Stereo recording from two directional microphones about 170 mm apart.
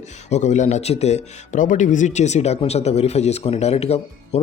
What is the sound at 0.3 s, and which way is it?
Speech, 45° left (ahead or behind).